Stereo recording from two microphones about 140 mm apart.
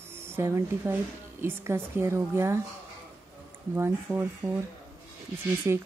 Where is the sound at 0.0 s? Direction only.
15° right (ahead or behind).